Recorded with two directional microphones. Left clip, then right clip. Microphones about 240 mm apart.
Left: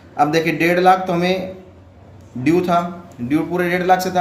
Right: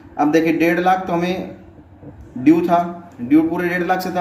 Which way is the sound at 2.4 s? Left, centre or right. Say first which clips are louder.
Right 2 dB; left.